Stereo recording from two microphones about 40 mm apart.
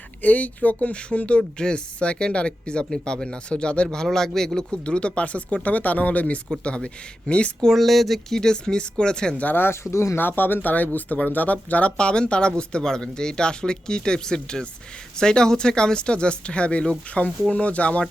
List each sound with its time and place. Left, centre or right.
0.2 s speech: left
1.4 s speech: centre
3.9 s speech: centre
4.9 s speech: left
7.6 s speech: centre
8.4 s speech: centre
10.2 s speech: left
11.9 s speech: left
17.5 s speech: left